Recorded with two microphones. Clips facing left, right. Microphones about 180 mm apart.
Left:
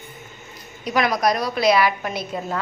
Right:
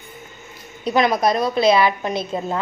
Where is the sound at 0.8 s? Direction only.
25° right (ahead or behind).